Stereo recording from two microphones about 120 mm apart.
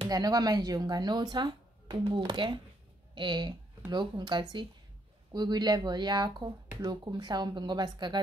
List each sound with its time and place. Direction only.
0.1 s speech: 35° right (ahead or behind)